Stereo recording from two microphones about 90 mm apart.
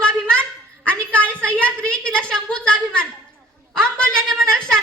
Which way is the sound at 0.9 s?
15° left (ahead or behind).